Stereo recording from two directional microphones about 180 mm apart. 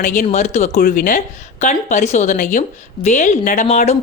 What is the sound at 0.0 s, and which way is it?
A woman's voice, 45° left (ahead or behind).